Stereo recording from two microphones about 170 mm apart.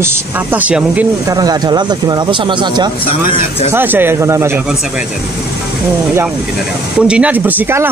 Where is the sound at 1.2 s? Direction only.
20° right (ahead or behind).